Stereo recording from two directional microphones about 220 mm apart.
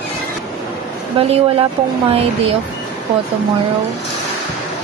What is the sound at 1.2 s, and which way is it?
Speech, 25° right (ahead or behind).